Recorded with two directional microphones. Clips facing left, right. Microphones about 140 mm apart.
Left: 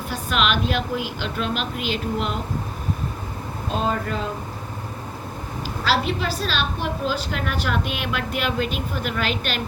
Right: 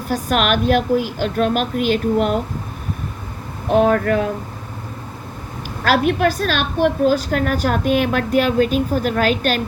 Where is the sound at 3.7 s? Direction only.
65° right (ahead or behind).